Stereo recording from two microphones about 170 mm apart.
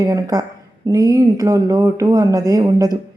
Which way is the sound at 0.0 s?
20° right (ahead or behind).